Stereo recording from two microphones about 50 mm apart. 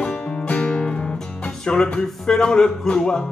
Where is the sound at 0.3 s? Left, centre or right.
Left.